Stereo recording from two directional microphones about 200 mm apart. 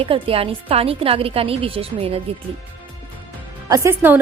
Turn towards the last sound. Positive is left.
turn(degrees=-10)  # may be behind; listen again after turning